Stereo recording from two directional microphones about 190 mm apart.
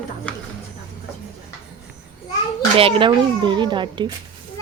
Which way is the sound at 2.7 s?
30° right (ahead or behind).